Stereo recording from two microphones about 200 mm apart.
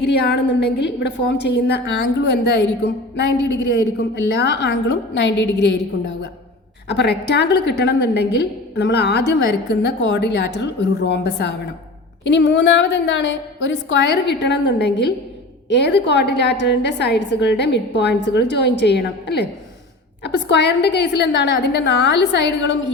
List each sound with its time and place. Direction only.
0.0 s a woman's voice: 55° left (ahead or behind)
6.8 s a woman's voice: 60° left (ahead or behind)